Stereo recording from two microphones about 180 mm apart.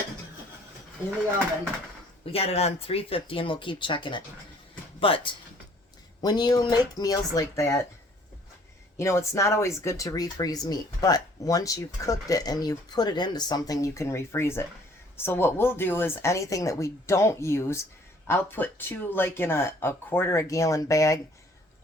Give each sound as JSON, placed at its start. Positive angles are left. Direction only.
{"t": 2.2, "sound": "speech", "side_deg": 35}
{"t": 9.0, "sound": "speech", "side_deg": 15}